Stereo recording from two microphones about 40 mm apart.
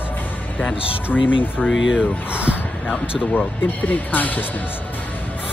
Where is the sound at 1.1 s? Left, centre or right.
Left.